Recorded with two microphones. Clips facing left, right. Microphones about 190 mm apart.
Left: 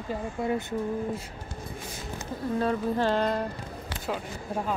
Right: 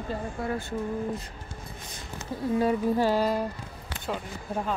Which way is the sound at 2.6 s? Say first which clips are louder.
Right 2 dB; 10° right (ahead or behind).